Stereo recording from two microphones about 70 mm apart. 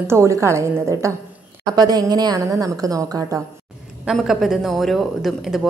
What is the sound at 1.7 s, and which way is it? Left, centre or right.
A woman's voice, right.